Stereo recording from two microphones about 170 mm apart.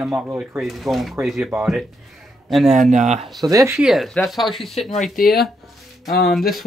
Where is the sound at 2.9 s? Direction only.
45° right (ahead or behind).